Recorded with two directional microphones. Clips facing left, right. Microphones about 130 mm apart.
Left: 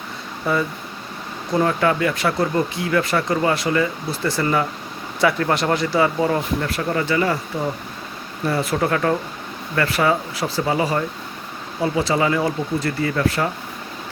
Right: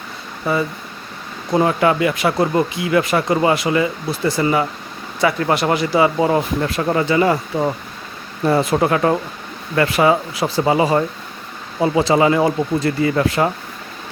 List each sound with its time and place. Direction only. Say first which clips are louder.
0.5 s speech: right 2 dB; 5° right (ahead or behind)
1.5 s speech: right 3 dB; 15° right (ahead or behind)